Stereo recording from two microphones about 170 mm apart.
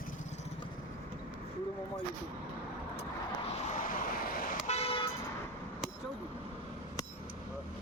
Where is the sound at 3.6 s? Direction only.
55° left (ahead or behind).